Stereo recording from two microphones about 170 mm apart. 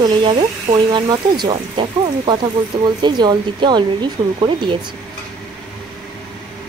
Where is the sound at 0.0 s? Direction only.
30° right (ahead or behind).